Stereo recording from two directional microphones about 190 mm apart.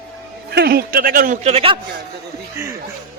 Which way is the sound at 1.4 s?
30° right (ahead or behind).